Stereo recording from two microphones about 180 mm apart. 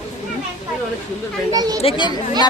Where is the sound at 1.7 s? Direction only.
30° left (ahead or behind).